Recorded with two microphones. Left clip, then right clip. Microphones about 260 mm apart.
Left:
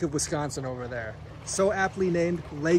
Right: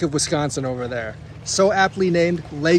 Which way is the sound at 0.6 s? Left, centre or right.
Right.